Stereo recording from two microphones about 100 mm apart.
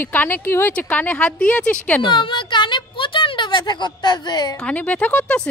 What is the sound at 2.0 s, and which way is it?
A woman's voice, 50° left (ahead or behind).